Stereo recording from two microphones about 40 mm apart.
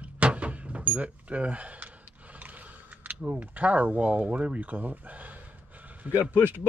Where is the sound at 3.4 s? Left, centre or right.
Right.